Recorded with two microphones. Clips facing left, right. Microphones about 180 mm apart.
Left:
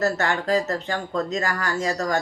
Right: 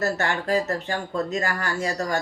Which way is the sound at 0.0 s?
35° left (ahead or behind).